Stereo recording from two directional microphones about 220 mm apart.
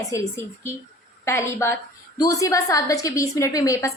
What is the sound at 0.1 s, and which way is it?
A woman's voice, 10° left (ahead or behind).